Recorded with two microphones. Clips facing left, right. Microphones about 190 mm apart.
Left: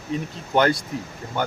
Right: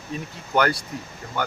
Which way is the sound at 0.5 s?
25° left (ahead or behind).